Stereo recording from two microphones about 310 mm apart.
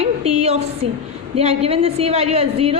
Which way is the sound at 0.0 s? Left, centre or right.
Centre.